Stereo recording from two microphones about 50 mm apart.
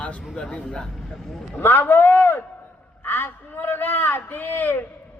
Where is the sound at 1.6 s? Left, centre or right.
Left.